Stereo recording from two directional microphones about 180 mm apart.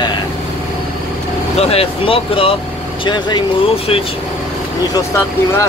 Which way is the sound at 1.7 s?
30° left (ahead or behind).